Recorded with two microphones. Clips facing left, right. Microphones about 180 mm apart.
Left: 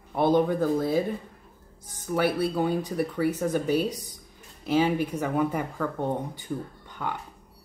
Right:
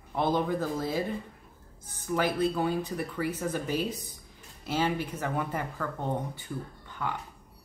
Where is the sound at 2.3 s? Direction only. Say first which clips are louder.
Left 2 dB; 10° left (ahead or behind).